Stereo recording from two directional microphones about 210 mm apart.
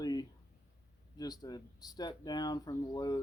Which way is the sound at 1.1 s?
20° left (ahead or behind).